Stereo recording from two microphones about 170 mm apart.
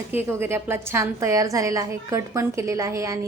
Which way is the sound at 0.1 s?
15° right (ahead or behind).